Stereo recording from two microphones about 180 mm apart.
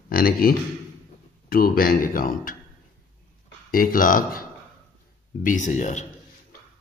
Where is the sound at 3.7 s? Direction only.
50° left (ahead or behind).